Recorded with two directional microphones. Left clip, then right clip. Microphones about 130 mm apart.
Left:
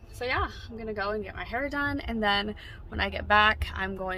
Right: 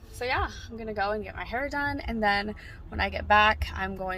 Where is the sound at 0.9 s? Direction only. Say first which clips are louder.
Right 2 dB; 15° left (ahead or behind).